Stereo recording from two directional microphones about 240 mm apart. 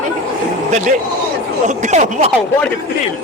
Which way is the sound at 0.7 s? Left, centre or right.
Right.